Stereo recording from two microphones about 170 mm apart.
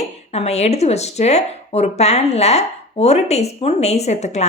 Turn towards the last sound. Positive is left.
turn(degrees=40)  # may be behind; listen again after turning